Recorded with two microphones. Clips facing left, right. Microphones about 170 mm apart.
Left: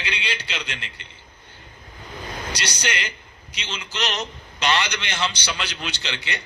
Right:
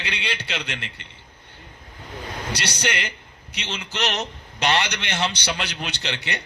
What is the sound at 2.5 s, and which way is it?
A man's voice, 60° right (ahead or behind).